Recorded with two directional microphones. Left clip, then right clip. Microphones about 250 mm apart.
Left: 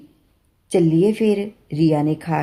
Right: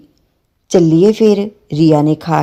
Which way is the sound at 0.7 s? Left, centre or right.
Right.